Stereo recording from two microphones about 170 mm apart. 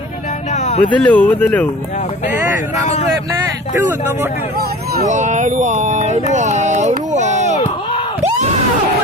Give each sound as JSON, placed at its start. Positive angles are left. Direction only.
{"t": 0.5, "sound": "vehicle", "side_deg": 40}
{"t": 0.9, "sound": "speech", "side_deg": 10}
{"t": 5.0, "sound": "speech", "side_deg": -45}
{"t": 6.9, "sound": "a sound", "side_deg": -45}